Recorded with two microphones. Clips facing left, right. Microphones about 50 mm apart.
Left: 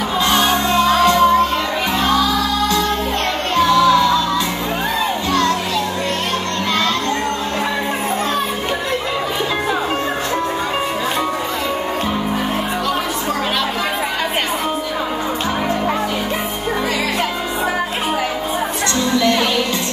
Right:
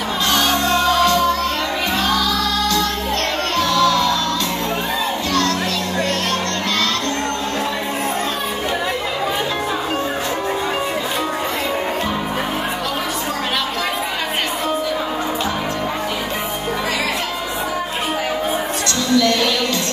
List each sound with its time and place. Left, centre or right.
0.3 s music: left
3.5 s music: centre